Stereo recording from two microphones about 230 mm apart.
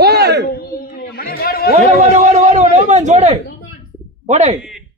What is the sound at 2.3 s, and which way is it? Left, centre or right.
A man's voice, right.